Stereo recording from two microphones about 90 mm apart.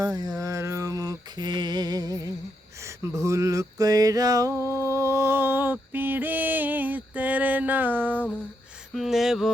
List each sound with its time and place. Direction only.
0.0 s mantra: 45° right (ahead or behind)
2.8 s a sound: 35° right (ahead or behind)
4.7 s mantra: 30° right (ahead or behind)
8.9 s mantra: centre (ahead or behind)